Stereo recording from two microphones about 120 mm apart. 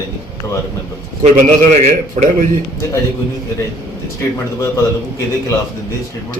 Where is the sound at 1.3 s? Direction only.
75° right (ahead or behind).